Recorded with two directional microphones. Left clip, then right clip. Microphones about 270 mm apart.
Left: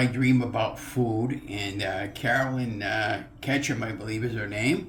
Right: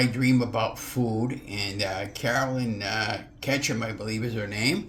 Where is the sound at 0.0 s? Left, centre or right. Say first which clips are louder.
Right 1 dB; right.